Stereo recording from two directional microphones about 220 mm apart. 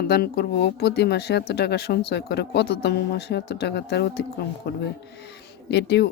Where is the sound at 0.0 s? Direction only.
45° left (ahead or behind).